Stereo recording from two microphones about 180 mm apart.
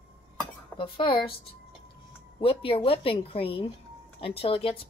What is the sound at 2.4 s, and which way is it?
Speech, 30° left (ahead or behind).